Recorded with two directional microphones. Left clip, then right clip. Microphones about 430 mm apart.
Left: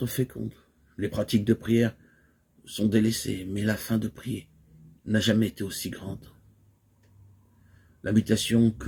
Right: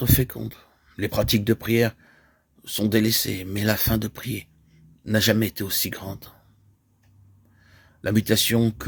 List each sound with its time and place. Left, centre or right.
0.0 s speech: right
8.0 s speech: right